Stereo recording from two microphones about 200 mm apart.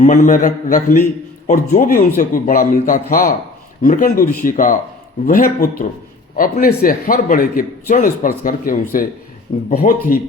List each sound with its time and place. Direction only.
0.0 s a man's voice: 40° left (ahead or behind)